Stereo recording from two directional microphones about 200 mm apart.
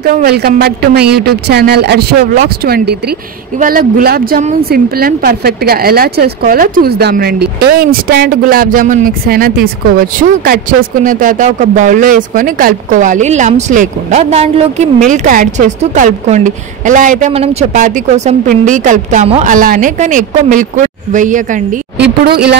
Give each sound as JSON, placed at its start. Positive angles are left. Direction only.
{"t": 0.1, "sound": "a woman's voice", "side_deg": -50}
{"t": 4.6, "sound": "a woman's voice", "side_deg": -50}
{"t": 21.9, "sound": "speech", "side_deg": -55}